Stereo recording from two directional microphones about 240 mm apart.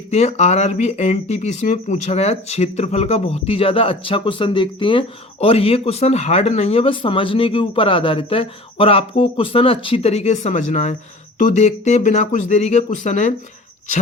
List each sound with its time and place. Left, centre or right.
0.1 s speech: left